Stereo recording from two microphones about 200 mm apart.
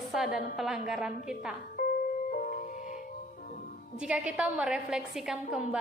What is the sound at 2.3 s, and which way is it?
Music, 45° left (ahead or behind).